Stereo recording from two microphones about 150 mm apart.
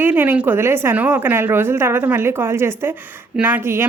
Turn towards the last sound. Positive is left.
turn(degrees=-15)  # may be behind; listen again after turning